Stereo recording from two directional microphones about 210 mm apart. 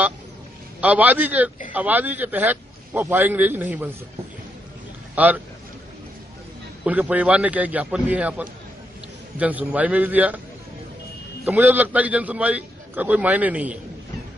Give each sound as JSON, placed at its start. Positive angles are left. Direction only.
{"t": 0.7, "sound": "a man's voice", "side_deg": -5}
{"t": 5.1, "sound": "speech", "side_deg": -10}
{"t": 6.8, "sound": "a man's voice", "side_deg": -5}
{"t": 11.4, "sound": "a man's voice", "side_deg": -10}